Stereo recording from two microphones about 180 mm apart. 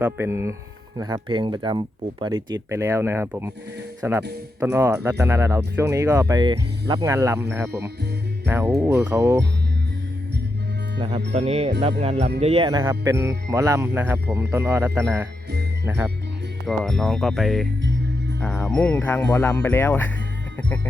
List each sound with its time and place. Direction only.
0.0 s speech: 15° right (ahead or behind)
2.5 s speech: 15° right (ahead or behind)
11.3 s speech: 35° right (ahead or behind)
12.8 s speech: 15° right (ahead or behind)
16.7 s speech: centre (ahead or behind)